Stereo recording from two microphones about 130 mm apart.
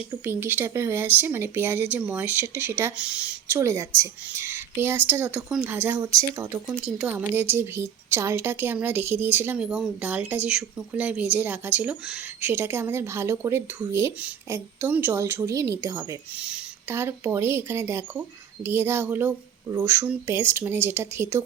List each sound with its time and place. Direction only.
0.1 s a woman's voice: 15° right (ahead or behind)
3.5 s a woman's voice: 20° right (ahead or behind)
6.7 s a woman's voice: 10° right (ahead or behind)
12.4 s a woman's voice: 15° right (ahead or behind)